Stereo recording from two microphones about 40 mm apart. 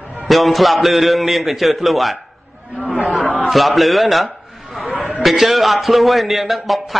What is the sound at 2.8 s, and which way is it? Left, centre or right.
Chatter, right.